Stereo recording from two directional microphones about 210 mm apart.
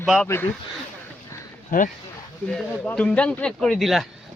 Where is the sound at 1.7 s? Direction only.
40° left (ahead or behind).